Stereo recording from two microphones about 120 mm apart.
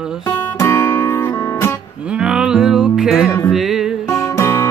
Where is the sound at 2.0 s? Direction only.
10° right (ahead or behind).